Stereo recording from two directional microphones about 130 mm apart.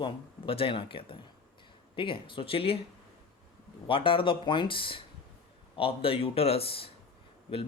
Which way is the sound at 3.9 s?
40° left (ahead or behind).